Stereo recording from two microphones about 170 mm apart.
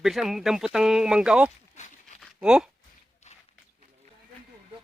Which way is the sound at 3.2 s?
40° left (ahead or behind).